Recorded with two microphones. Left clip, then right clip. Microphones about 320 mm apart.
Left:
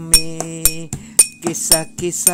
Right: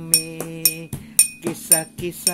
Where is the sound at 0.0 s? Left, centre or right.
Left.